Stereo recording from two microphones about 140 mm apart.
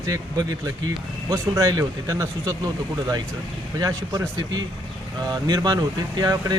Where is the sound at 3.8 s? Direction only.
25° right (ahead or behind).